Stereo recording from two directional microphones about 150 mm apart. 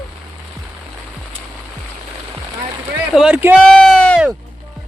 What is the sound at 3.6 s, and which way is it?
Speech, 5° left (ahead or behind).